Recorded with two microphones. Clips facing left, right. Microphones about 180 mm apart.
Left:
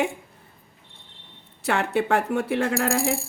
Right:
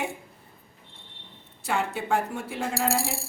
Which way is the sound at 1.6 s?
70° left (ahead or behind).